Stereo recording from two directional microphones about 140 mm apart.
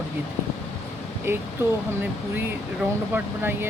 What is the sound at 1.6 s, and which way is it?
Speech, 20° right (ahead or behind).